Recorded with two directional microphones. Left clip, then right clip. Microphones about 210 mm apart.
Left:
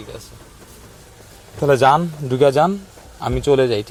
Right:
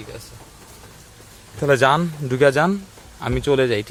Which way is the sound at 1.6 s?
5° right (ahead or behind).